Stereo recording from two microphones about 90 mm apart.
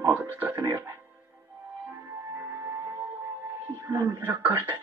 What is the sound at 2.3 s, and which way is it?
Music, 20° right (ahead or behind).